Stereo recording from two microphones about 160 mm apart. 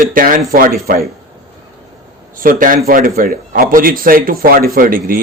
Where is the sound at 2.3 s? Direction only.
60° right (ahead or behind).